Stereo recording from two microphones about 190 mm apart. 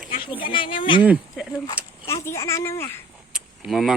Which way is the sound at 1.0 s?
5° right (ahead or behind).